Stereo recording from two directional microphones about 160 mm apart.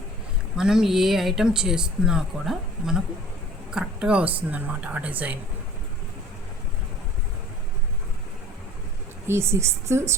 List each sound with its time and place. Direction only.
0.5 s speech: 5° right (ahead or behind)
9.2 s speech: 15° right (ahead or behind)